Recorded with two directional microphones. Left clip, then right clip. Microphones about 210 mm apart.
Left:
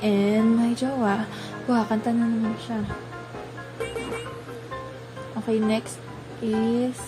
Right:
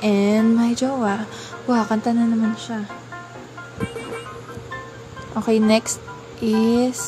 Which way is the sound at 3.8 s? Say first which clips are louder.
Even; centre (ahead or behind).